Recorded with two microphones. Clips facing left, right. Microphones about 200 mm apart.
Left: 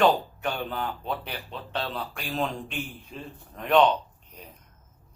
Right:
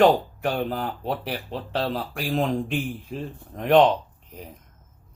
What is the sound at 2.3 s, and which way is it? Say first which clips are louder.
Speech: right 7 dB; 50° right (ahead or behind).